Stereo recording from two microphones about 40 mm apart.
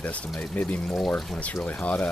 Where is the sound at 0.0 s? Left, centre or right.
Left.